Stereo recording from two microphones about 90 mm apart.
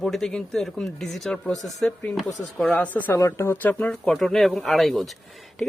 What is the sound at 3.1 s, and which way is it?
Speech, 35° left (ahead or behind).